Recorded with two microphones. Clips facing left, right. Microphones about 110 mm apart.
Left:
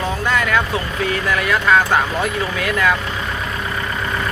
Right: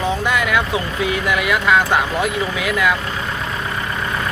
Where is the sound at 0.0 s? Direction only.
15° right (ahead or behind).